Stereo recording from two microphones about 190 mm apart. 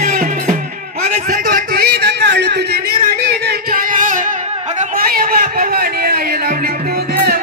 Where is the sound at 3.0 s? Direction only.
55° right (ahead or behind).